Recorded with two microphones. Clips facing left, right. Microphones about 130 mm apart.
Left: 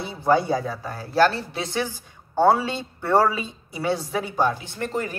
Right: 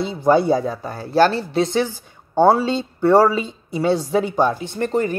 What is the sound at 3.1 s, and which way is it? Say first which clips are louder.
Speech: right 6 dB; 25° right (ahead or behind).